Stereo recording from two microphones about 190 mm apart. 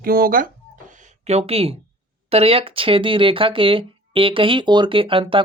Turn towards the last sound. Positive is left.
turn(degrees=-25)  # may be behind; listen again after turning